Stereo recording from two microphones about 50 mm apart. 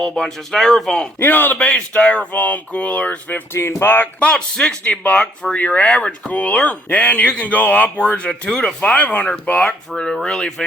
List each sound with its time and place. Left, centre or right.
0.0 s speech: centre
1.2 s a sound: left
1.5 s speech: left
2.3 s a sound: left
3.5 s speech: left
3.8 s speech: left
4.2 s speech: centre
4.8 s speech: left